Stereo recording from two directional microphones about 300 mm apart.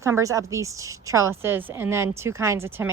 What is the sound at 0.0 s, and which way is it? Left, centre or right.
A woman's voice, centre.